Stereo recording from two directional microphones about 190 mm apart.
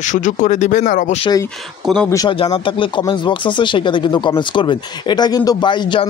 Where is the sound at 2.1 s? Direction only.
25° left (ahead or behind).